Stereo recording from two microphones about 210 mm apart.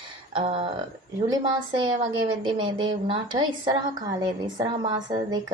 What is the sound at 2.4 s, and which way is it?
A woman's voice, 20° right (ahead or behind).